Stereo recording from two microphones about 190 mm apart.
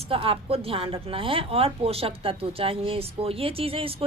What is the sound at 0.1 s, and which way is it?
A woman's voice, 30° right (ahead or behind).